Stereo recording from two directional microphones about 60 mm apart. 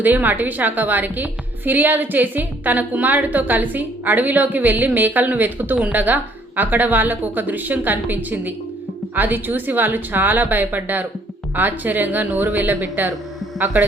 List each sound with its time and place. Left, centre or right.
0.0 s a woman's voice: right